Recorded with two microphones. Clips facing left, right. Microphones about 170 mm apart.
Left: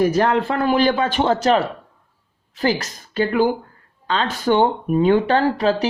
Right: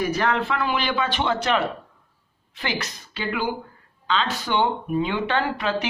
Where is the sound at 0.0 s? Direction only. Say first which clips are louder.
Left 6 dB; 45° left (ahead or behind).